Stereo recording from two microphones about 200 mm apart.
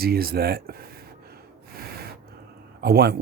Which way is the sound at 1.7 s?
50° right (ahead or behind).